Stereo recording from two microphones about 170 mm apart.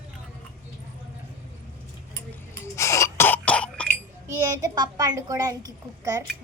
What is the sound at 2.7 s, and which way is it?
Throat clearing, 15° left (ahead or behind).